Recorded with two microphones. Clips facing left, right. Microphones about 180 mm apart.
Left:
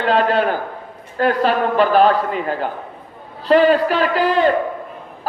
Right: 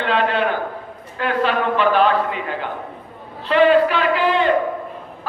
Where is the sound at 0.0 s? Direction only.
40° left (ahead or behind).